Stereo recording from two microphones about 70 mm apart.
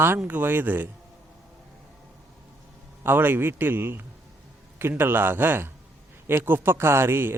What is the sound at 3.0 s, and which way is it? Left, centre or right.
Speech, right.